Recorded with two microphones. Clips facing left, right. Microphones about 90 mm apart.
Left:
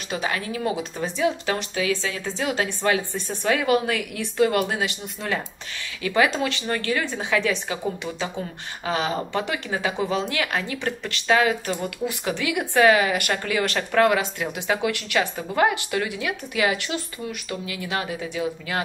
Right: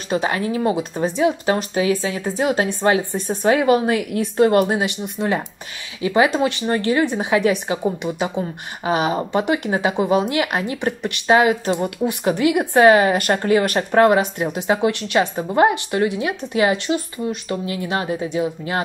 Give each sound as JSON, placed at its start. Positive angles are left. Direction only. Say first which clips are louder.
{"t": 0.1, "sound": "speech", "louder": "right 7 dB", "side_deg": -30}
{"t": 3.4, "sound": "speech", "louder": "right 5 dB", "side_deg": -30}